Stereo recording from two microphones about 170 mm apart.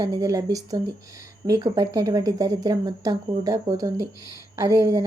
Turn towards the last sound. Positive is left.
turn(degrees=-20)  # may be behind; listen again after turning